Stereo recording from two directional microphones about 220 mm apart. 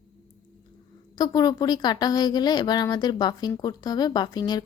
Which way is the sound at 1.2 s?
20° left (ahead or behind).